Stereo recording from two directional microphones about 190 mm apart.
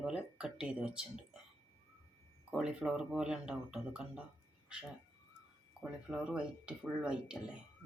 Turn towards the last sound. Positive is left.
turn(degrees=-5)  # may be behind; listen again after turning